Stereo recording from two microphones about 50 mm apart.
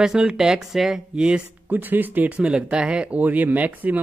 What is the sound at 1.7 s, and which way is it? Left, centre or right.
Speech, right.